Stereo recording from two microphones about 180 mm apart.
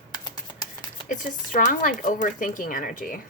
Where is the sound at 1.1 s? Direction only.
50° left (ahead or behind).